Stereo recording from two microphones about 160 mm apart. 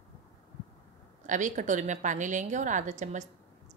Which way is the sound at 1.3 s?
50° right (ahead or behind).